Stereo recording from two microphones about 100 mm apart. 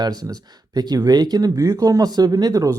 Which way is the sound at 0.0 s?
40° right (ahead or behind).